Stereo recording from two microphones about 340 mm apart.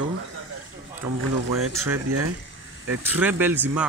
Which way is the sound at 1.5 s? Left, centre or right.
Right.